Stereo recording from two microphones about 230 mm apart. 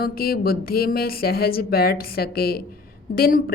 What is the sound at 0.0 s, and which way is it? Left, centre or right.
A woman's voice, left.